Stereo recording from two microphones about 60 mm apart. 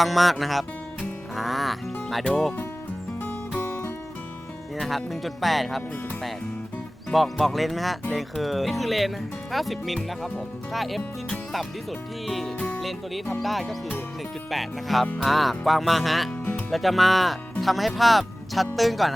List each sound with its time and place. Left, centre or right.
0.0 s speech: centre
3.6 s music: left
4.8 s speech: centre
7.1 s speech: centre
12.5 s speech: left
12.8 s speech: centre